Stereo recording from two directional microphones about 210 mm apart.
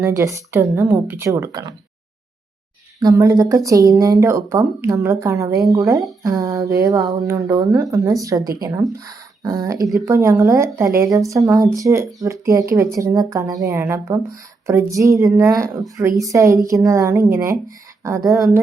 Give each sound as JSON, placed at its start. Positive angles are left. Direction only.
{"t": 0.0, "sound": "speech", "side_deg": -15}
{"t": 3.0, "sound": "speech", "side_deg": -15}
{"t": 18.3, "sound": "a woman's voice", "side_deg": 0}